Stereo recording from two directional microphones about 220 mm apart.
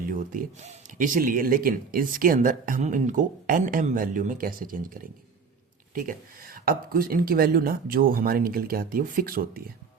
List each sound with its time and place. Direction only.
0.0 s speech: 40° right (ahead or behind)
5.9 s speech: 40° right (ahead or behind)